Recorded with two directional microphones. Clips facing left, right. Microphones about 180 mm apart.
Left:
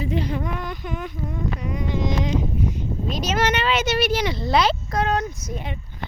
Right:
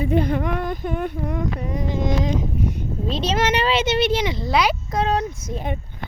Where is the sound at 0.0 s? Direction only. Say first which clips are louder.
Right 5 dB; 55° right (ahead or behind); by 1.5 s 75° right (ahead or behind).